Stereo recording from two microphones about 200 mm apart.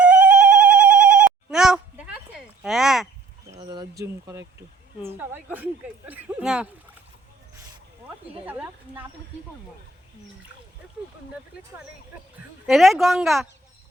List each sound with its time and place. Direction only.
0.0 s telephone bell ringing: 5° right (ahead or behind)
2.6 s a sound: centre (ahead or behind)
3.5 s a woman's voice: 25° right (ahead or behind); by 6.7 s 5° right (ahead or behind)
8.4 s a woman's voice: 10° right (ahead or behind)
12.6 s speech: centre (ahead or behind)